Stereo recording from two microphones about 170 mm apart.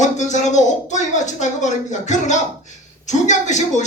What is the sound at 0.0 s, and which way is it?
Speech, 45° left (ahead or behind).